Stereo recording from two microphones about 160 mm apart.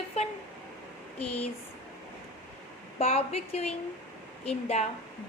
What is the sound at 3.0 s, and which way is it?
A woman's voice, 40° left (ahead or behind).